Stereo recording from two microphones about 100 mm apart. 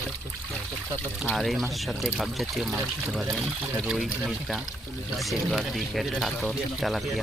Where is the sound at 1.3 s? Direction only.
Centre (ahead or behind).